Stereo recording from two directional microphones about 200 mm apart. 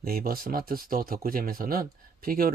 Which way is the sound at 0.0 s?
45° right (ahead or behind).